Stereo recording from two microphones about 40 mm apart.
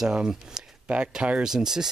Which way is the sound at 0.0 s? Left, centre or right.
Centre.